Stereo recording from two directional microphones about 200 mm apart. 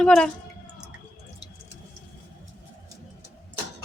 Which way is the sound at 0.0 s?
5° left (ahead or behind).